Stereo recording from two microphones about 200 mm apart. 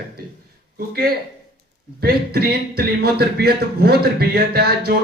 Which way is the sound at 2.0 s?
50° right (ahead or behind).